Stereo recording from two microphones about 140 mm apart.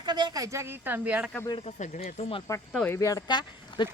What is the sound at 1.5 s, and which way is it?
Speech, 55° left (ahead or behind).